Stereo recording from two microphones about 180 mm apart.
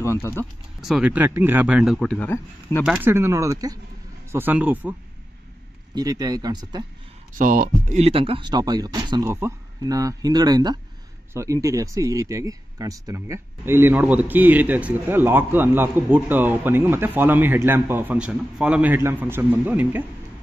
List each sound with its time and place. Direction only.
0.0 s speech: 15° left (ahead or behind)
0.7 s speech: centre (ahead or behind)
2.8 s speech: 5° right (ahead or behind)
5.9 s speech: 20° right (ahead or behind)
7.3 s speech: 50° right (ahead or behind)
8.0 s speech: 30° right (ahead or behind); by 20.1 s 10° right (ahead or behind)